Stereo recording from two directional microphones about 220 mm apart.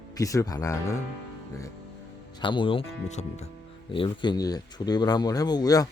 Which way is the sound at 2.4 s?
20° left (ahead or behind).